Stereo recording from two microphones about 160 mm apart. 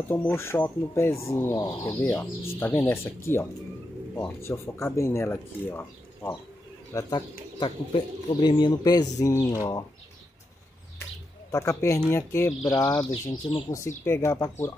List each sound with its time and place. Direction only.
0.1 s speech: 15° left (ahead or behind)
11.5 s speech: 20° left (ahead or behind)
13.1 s speech: 35° left (ahead or behind)
13.7 s speech: 20° left (ahead or behind)